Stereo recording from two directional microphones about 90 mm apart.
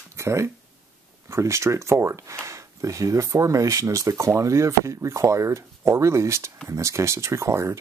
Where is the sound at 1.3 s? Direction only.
35° right (ahead or behind).